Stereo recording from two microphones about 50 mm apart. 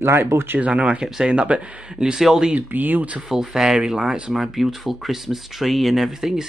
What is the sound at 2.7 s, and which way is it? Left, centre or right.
Speech, right.